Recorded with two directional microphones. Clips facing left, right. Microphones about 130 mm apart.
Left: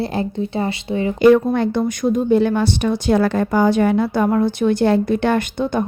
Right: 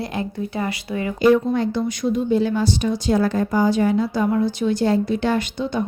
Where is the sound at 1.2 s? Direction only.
60° left (ahead or behind).